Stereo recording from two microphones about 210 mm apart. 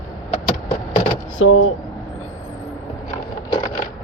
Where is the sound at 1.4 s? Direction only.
70° left (ahead or behind).